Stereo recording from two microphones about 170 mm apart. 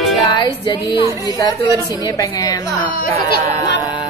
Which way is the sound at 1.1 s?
20° right (ahead or behind).